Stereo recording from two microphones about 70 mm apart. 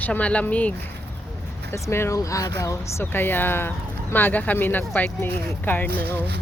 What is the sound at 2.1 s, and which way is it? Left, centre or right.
Speech, left.